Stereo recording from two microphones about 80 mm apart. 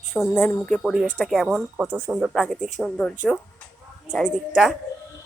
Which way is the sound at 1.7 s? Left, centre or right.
Centre.